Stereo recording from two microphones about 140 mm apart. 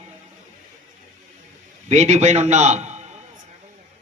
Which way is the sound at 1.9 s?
55° right (ahead or behind).